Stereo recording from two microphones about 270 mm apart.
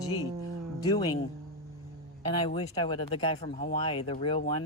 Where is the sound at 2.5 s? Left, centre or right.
Centre.